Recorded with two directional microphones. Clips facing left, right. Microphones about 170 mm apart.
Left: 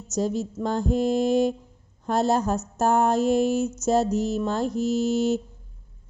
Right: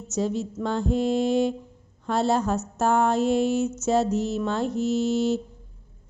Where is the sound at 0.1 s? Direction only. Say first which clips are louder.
Left 1 dB; 40° left (ahead or behind).